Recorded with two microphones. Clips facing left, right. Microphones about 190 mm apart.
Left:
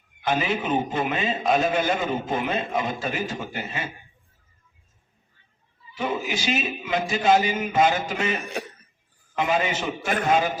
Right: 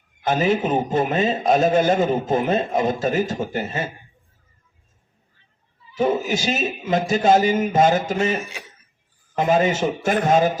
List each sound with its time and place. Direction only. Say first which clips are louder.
0.3 s a man's voice: right 5 dB; 40° right (ahead or behind)
5.9 s a man's voice: right 7 dB; 45° right (ahead or behind)